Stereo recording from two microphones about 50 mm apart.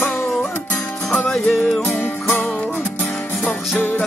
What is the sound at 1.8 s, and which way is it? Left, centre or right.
Music, left.